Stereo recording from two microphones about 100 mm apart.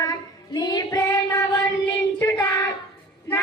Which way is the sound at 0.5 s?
45° left (ahead or behind).